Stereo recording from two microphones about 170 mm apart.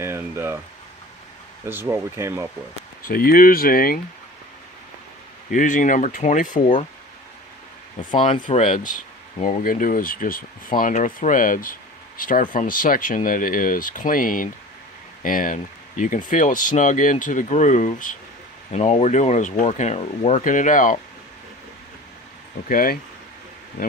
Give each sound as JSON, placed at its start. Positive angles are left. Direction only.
{"t": 0.0, "sound": "speech", "side_deg": -15}
{"t": 1.6, "sound": "speech", "side_deg": -15}
{"t": 3.1, "sound": "speech", "side_deg": 60}
{"t": 5.5, "sound": "speech", "side_deg": 50}
{"t": 8.5, "sound": "speech", "side_deg": 45}
{"t": 22.7, "sound": "speech", "side_deg": 55}